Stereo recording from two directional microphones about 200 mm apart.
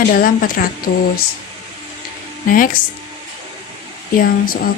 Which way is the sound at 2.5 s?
45° left (ahead or behind).